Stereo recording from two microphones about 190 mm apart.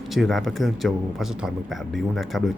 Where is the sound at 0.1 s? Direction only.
Centre (ahead or behind).